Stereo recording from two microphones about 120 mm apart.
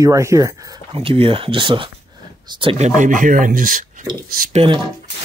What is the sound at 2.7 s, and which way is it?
Speech, 80° right.